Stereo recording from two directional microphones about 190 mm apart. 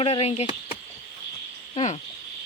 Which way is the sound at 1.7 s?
35° left (ahead or behind).